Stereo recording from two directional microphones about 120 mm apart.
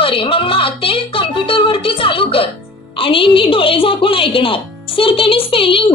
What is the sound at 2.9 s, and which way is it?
A woman's voice, 50° left (ahead or behind).